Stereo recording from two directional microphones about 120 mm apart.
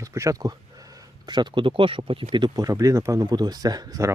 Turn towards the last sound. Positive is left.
turn(degrees=-30)  # may be behind; listen again after turning